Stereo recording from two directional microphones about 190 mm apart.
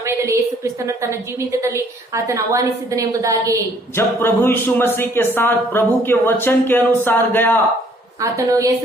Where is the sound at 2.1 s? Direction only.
15° right (ahead or behind).